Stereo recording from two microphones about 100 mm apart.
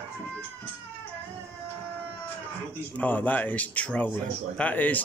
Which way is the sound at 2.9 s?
15° left (ahead or behind).